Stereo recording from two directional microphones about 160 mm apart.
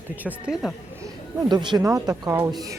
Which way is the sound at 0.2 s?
10° right (ahead or behind).